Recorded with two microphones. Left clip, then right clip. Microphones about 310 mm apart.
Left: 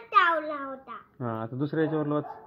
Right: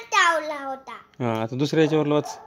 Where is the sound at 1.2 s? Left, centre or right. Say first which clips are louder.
Right 8 dB; right.